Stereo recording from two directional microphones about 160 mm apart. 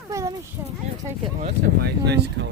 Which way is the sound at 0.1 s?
20° right (ahead or behind).